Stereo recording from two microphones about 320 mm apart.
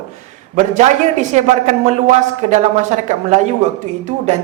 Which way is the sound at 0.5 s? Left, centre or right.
Right.